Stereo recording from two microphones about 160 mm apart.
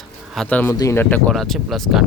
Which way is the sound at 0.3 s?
10° left (ahead or behind).